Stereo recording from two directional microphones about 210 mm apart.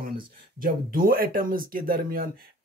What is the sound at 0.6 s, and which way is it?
Speech, 45° right (ahead or behind).